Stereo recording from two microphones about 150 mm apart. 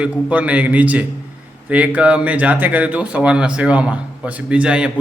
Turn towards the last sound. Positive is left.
turn(degrees=-5)  # may be behind; listen again after turning